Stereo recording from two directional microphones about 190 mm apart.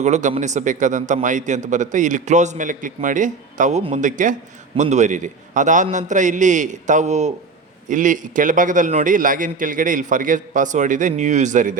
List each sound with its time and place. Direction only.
0.0 s a man's voice: 40° right (ahead or behind)